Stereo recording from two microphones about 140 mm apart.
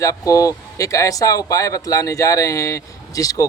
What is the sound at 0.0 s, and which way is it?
Speech, 25° left (ahead or behind).